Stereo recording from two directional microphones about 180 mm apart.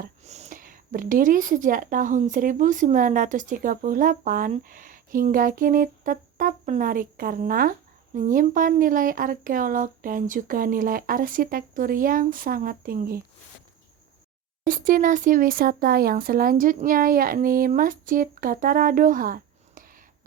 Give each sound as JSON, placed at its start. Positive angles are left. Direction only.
{"t": 0.0, "sound": "a woman's voice", "side_deg": -40}
{"t": 14.6, "sound": "a woman's voice", "side_deg": -50}